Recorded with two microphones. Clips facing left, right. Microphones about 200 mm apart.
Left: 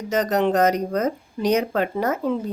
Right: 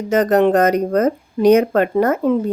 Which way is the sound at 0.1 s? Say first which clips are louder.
Right 7 dB; 55° right (ahead or behind).